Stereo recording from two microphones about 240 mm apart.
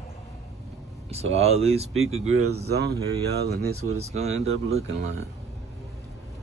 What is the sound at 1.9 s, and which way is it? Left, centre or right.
Speech, right.